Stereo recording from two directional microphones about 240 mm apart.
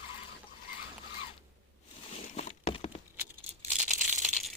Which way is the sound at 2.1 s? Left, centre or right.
Left.